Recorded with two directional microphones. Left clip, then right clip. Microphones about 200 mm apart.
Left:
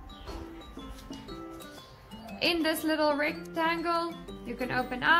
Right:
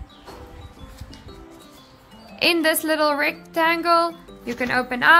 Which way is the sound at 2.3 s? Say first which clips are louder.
Right 9 dB; 50° right (ahead or behind).